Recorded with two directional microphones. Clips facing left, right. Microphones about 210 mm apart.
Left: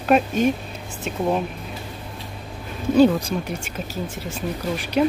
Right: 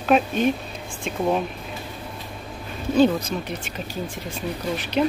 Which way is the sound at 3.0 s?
10° left (ahead or behind).